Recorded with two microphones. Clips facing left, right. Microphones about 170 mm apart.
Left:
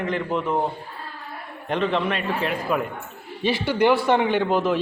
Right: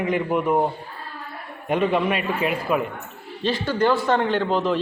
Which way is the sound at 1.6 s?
10° right (ahead or behind).